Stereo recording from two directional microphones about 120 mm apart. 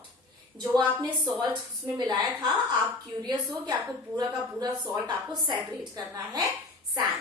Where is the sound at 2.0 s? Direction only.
35° right (ahead or behind).